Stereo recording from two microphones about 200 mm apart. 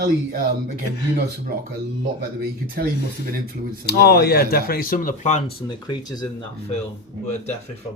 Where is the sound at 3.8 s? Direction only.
50° left (ahead or behind); by 5.4 s 35° left (ahead or behind).